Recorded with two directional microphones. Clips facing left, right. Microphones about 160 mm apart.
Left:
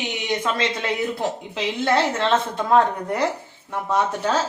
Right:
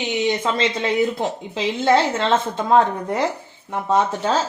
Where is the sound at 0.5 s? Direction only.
25° right (ahead or behind).